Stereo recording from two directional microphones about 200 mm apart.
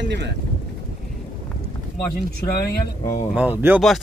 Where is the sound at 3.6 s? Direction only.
5° right (ahead or behind).